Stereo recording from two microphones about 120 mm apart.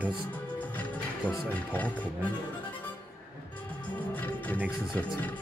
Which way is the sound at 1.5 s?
15° left (ahead or behind).